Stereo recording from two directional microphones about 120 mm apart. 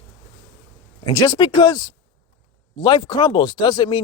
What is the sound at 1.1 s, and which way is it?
Speech, 35° left (ahead or behind).